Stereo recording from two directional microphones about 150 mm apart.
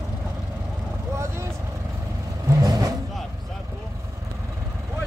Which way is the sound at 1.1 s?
20° right (ahead or behind).